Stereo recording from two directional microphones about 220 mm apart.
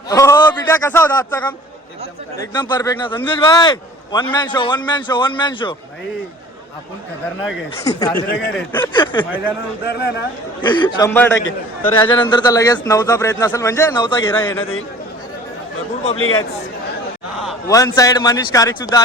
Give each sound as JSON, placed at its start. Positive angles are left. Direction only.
{"t": 0.1, "sound": "a man's voice", "side_deg": 15}
{"t": 7.9, "sound": "speech", "side_deg": 15}
{"t": 9.8, "sound": "speech", "side_deg": 50}
{"t": 10.6, "sound": "a man's voice", "side_deg": 20}
{"t": 11.1, "sound": "a man's voice", "side_deg": 10}
{"t": 12.0, "sound": "speech", "side_deg": 20}
{"t": 14.3, "sound": "speech", "side_deg": 10}
{"t": 16.1, "sound": "speech", "side_deg": 70}
{"t": 17.7, "sound": "speech", "side_deg": 15}